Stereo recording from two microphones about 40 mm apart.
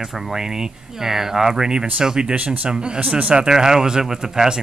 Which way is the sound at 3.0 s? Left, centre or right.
Right.